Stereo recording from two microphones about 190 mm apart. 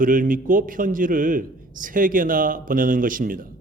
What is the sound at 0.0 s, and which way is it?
A man's voice, 45° right (ahead or behind).